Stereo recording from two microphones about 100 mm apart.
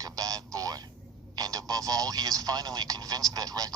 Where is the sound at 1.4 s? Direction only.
40° right (ahead or behind).